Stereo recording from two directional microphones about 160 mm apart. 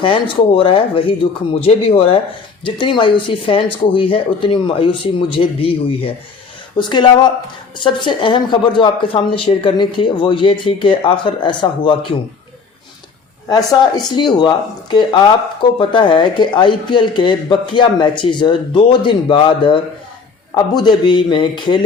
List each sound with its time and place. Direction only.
0.0 s speech: 30° left (ahead or behind)
13.5 s speech: 25° left (ahead or behind)